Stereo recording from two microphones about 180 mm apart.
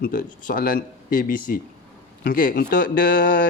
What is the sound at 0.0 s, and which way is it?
Speech, 50° left (ahead or behind).